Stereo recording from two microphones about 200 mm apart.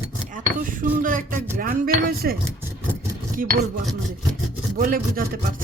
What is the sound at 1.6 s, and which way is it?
Speech, 45° right (ahead or behind).